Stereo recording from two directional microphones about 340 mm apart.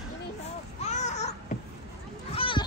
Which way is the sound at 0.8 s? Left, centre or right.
Centre.